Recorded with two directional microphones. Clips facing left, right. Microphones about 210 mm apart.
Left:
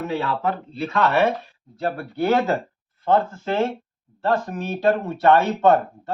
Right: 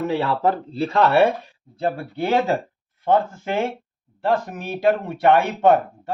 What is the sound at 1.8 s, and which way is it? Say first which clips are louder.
Speech: even; 15° right (ahead or behind).